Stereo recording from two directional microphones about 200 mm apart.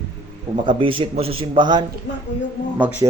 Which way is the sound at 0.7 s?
25° right (ahead or behind).